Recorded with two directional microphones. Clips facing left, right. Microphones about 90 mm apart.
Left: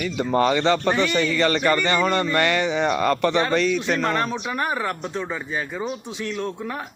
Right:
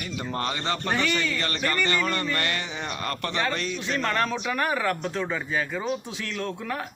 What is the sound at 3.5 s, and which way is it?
Speech, 85° left.